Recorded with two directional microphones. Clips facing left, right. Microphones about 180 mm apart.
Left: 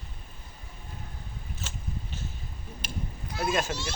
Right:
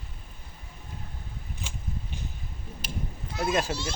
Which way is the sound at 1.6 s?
15° right (ahead or behind).